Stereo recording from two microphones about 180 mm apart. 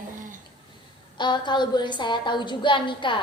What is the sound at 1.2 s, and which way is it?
A woman's voice, 25° left (ahead or behind).